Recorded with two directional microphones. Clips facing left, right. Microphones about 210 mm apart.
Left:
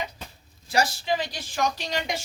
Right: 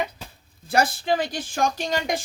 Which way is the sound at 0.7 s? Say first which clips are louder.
Right 3 dB; 55° right (ahead or behind).